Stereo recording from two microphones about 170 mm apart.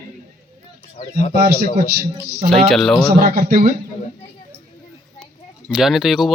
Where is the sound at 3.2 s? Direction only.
60° right (ahead or behind).